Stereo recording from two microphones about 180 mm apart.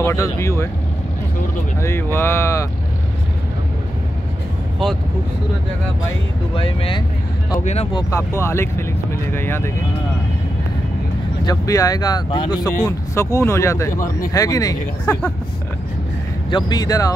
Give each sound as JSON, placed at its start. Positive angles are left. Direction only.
{"t": 0.0, "sound": "speech", "side_deg": 15}
{"t": 1.8, "sound": "speech", "side_deg": 15}
{"t": 6.5, "sound": "speech", "side_deg": 30}
{"t": 7.9, "sound": "speech", "side_deg": 15}
{"t": 11.4, "sound": "speech", "side_deg": 20}
{"t": 16.4, "sound": "speech", "side_deg": 25}